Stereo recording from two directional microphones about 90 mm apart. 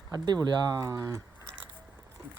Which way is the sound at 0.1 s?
50° right (ahead or behind).